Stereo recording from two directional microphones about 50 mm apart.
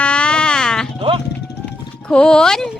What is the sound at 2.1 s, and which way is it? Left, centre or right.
Speech, centre.